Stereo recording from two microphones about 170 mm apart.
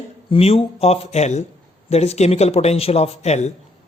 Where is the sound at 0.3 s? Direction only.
35° left (ahead or behind).